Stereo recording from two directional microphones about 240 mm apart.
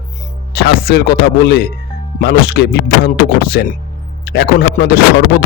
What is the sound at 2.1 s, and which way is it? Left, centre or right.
Speech, left.